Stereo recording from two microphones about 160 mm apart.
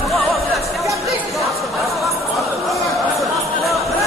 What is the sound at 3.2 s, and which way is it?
Music, centre (ahead or behind).